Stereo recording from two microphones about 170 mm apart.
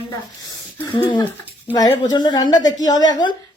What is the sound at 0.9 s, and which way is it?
A woman's voice, 30° left (ahead or behind).